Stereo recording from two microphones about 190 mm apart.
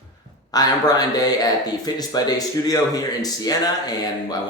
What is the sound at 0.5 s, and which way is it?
Speech, 20° left (ahead or behind).